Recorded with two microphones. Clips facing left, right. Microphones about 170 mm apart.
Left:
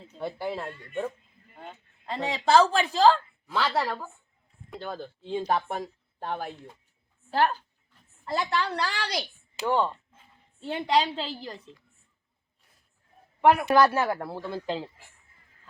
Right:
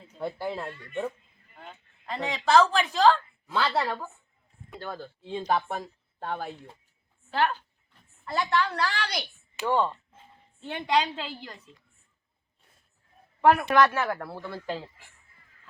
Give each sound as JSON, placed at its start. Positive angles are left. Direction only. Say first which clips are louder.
{"t": 0.4, "sound": "speech", "louder": "left 2 dB", "side_deg": 10}
{"t": 1.5, "sound": "speech", "louder": "left 3 dB", "side_deg": 30}
{"t": 3.4, "sound": "a woman's voice", "louder": "even", "side_deg": 0}
{"t": 5.2, "sound": "speech", "louder": "even", "side_deg": 0}
{"t": 7.3, "sound": "a woman's voice", "louder": "left 2 dB", "side_deg": 40}
{"t": 9.6, "sound": "a woman's voice", "louder": "even", "side_deg": 5}
{"t": 10.6, "sound": "a woman's voice", "louder": "left 1 dB", "side_deg": 30}
{"t": 13.4, "sound": "a man's voice", "louder": "even", "side_deg": 15}
{"t": 13.7, "sound": "speech", "louder": "left 1 dB", "side_deg": 30}